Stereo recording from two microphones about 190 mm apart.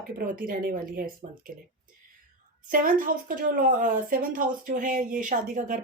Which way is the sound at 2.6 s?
45° right (ahead or behind).